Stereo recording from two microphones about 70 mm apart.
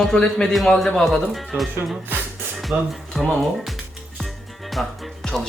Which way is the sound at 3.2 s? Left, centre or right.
Centre.